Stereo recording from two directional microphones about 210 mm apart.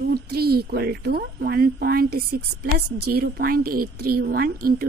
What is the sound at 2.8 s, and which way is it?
Speech, 90° right.